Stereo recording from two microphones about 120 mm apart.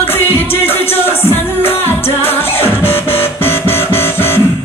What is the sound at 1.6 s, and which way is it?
Music, 20° left (ahead or behind).